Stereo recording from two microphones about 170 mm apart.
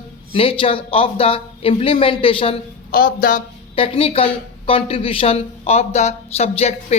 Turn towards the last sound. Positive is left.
turn(degrees=40)  # may be behind; listen again after turning